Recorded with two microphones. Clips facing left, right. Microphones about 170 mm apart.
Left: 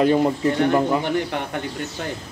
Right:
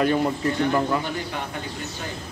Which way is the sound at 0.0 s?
20° left (ahead or behind).